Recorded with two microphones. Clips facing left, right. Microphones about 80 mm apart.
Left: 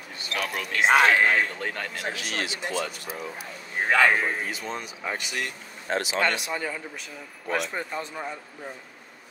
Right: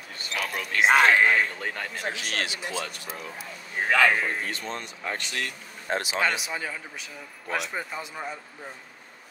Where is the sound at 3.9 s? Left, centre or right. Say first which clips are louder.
Left 1 dB; left.